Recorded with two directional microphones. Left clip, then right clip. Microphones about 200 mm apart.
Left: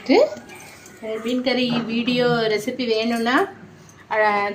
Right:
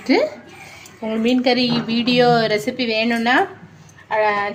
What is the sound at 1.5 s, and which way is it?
A woman's voice, 30° right (ahead or behind).